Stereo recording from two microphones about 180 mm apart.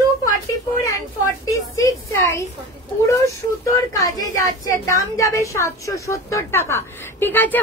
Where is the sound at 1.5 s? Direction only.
20° left (ahead or behind).